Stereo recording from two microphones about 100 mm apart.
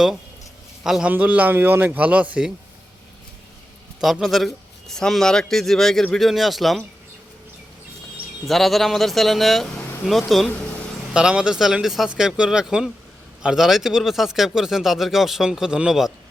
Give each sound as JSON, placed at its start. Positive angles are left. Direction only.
{"t": 0.9, "sound": "speech", "side_deg": -5}
{"t": 4.0, "sound": "speech", "side_deg": 0}
{"t": 8.4, "sound": "speech", "side_deg": 0}